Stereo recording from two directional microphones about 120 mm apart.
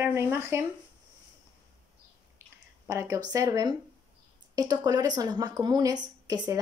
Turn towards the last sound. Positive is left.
turn(degrees=-30)  # may be behind; listen again after turning